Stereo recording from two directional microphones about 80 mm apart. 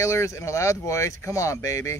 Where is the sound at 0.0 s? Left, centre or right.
Left.